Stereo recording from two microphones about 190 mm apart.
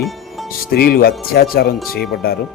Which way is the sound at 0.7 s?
50° left (ahead or behind).